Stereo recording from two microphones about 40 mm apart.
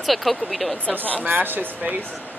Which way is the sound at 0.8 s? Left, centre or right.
Left.